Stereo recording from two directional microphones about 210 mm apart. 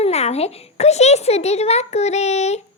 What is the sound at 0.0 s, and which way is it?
A child's voice, 30° left (ahead or behind).